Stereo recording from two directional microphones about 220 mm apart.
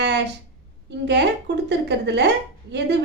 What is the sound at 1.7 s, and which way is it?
Speech, 50° right (ahead or behind).